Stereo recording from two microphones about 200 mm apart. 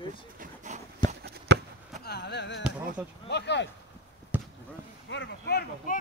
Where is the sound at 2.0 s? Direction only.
55° left (ahead or behind).